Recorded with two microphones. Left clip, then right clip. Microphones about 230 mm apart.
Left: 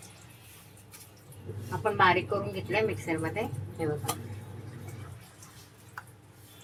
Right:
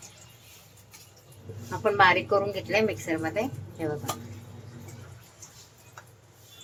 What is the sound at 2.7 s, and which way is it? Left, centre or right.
Speech, right.